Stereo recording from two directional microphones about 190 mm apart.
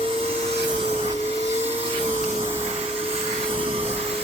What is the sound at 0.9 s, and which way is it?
Vacuum cleaner, 30° right (ahead or behind).